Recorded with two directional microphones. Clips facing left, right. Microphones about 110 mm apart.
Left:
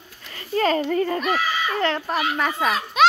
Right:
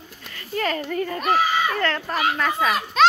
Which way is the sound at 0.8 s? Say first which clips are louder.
Left 4 dB; 40° left (ahead or behind).